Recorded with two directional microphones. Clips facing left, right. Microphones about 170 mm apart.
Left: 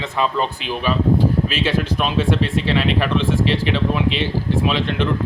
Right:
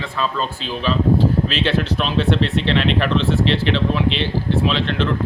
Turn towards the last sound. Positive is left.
turn(degrees=15)  # may be behind; listen again after turning